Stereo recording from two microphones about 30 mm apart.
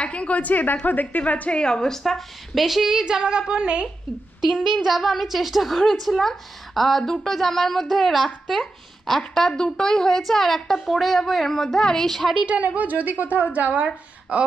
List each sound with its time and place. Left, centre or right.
0.0 s a woman's voice: left
0.8 s speech: left
1.2 s a woman's voice: left
1.5 s a woman's voice: left
1.9 s a woman's voice: centre
2.5 s a woman's voice: centre
2.9 s a woman's voice: centre
4.5 s a woman's voice: centre
9.5 s a woman's voice: left
12.4 s a woman's voice: right